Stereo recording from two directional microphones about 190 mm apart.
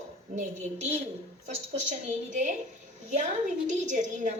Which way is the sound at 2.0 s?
40° right (ahead or behind).